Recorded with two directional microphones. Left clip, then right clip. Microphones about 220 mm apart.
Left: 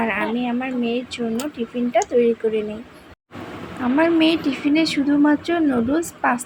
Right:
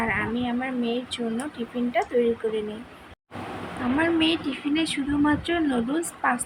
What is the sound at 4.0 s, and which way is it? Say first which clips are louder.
A woman's voice: left 6 dB; 20° left (ahead or behind).